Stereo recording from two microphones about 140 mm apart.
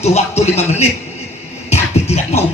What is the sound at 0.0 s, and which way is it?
Speech, 50° left (ahead or behind).